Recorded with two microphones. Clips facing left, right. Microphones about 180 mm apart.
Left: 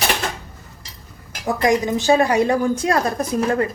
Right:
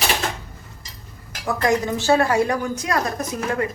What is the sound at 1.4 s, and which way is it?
A woman's voice, 15° left (ahead or behind).